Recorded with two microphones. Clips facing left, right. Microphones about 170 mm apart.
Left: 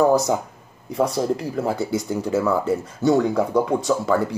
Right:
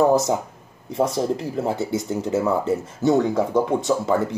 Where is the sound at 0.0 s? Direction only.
25° right (ahead or behind).